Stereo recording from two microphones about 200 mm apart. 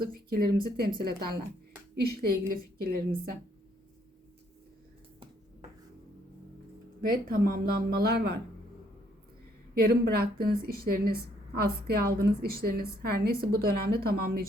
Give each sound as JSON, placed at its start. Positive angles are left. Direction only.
{"t": 0.0, "sound": "speech", "side_deg": -50}
{"t": 7.0, "sound": "speech", "side_deg": -45}
{"t": 9.7, "sound": "speech", "side_deg": -50}